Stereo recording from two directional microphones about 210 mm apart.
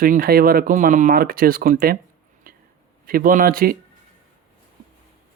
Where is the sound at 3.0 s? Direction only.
45° right (ahead or behind).